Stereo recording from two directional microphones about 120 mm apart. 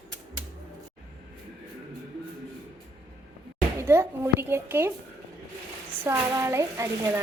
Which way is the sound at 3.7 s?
20° right (ahead or behind).